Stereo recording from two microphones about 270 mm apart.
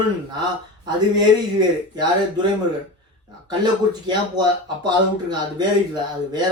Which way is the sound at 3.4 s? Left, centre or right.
Centre.